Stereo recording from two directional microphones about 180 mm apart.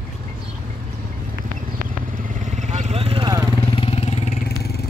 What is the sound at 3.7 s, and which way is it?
Vehicle, 35° left (ahead or behind).